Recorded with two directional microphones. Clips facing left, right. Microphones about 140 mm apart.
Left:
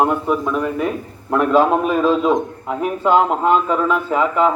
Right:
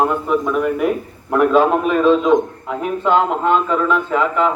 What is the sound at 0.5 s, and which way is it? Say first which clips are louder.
A man's voice: right 3 dB; 5° right (ahead or behind).